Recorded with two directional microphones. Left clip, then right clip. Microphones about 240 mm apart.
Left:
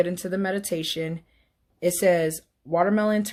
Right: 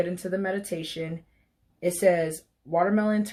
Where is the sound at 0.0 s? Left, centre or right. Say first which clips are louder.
Left 3 dB; left.